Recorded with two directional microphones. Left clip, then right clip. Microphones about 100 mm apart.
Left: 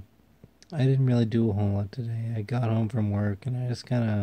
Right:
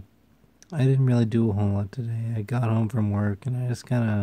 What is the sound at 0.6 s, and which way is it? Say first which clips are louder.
A man's voice: right 2 dB; 30° right (ahead or behind).